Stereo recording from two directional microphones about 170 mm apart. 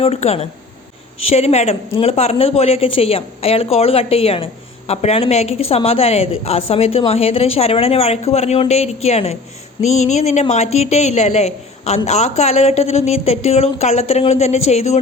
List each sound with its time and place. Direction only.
0.0 s a woman's voice: 40° left (ahead or behind)